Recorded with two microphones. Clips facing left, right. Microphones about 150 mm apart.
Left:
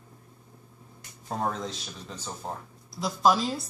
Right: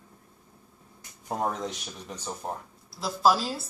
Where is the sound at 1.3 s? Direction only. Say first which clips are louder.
Right 1 dB; 15° right (ahead or behind).